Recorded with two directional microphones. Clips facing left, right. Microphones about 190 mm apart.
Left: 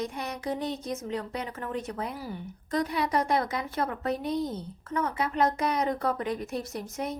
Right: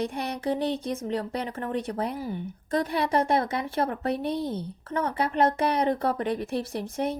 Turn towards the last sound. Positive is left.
turn(degrees=-30)  # may be behind; listen again after turning